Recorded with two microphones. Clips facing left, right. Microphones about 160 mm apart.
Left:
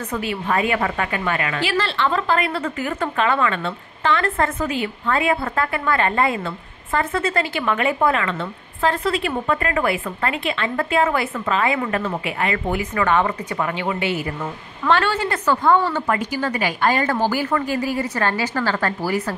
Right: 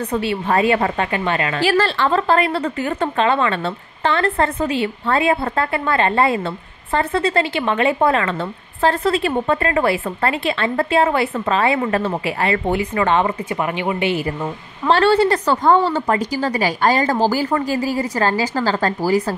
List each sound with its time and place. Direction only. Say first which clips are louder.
0.1 s a woman's voice: right 3 dB; 30° right (ahead or behind)
14.9 s a woman's voice: right 6 dB; 35° right (ahead or behind)